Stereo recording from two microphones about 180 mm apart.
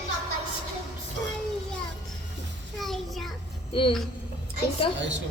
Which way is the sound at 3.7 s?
30° left (ahead or behind).